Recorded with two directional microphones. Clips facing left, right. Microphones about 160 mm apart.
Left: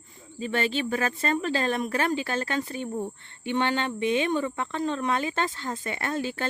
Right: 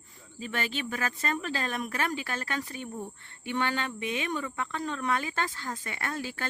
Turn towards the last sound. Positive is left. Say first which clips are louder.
# left 6 dB
turn(degrees=25)  # may be behind; listen again after turning